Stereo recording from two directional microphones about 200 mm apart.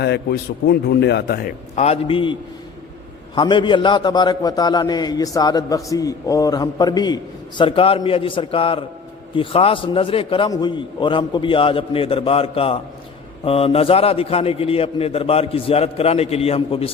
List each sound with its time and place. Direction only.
0.0 s a man's voice: 55° left (ahead or behind); by 16.9 s 30° left (ahead or behind)